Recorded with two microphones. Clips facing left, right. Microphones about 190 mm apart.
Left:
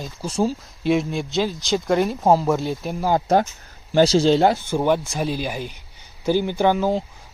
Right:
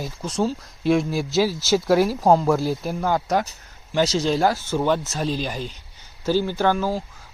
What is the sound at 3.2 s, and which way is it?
Speech, 30° left (ahead or behind).